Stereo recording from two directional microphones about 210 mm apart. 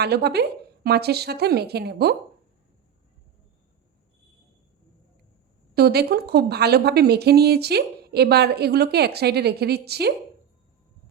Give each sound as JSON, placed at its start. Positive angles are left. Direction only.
{"t": 0.0, "sound": "speech", "side_deg": -50}
{"t": 5.7, "sound": "speech", "side_deg": -50}